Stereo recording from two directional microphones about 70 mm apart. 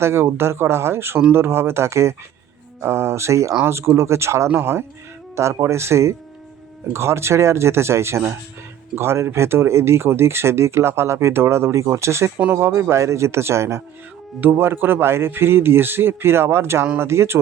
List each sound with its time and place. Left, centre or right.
0.0 s speech: right